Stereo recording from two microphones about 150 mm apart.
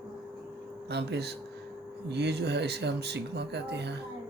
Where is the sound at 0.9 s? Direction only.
90° right.